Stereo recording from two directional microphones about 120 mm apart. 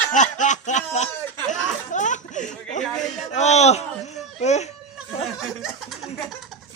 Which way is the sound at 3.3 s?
70° left (ahead or behind).